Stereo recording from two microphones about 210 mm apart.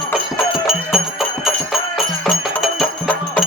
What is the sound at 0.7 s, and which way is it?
Music, centre (ahead or behind).